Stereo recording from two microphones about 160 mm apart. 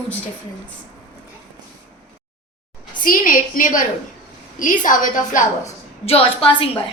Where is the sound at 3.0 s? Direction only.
55° left (ahead or behind); by 6.6 s 35° left (ahead or behind).